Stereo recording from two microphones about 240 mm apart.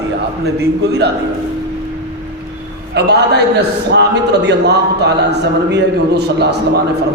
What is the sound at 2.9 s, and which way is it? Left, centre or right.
A man's voice, right.